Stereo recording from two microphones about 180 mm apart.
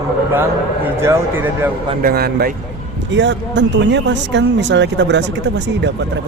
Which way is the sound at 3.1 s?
80° right.